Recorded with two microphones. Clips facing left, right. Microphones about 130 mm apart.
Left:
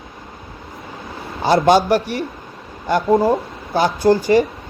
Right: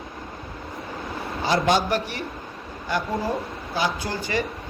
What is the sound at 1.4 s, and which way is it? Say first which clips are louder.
Speech: left 8 dB; 40° left (ahead or behind).